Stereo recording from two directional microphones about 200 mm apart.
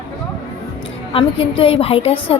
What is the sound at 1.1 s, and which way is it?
A woman's voice, 25° left (ahead or behind).